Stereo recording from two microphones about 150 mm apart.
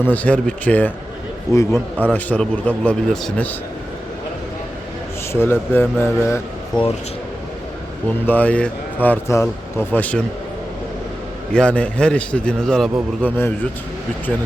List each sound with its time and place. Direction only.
0.0 s speech: 10° left (ahead or behind)
2.1 s speech: 10° left (ahead or behind)
5.3 s speech: 15° left (ahead or behind)
6.7 s speech: 30° left (ahead or behind)
8.3 s speech: 10° left (ahead or behind)
11.5 s speech: 10° left (ahead or behind)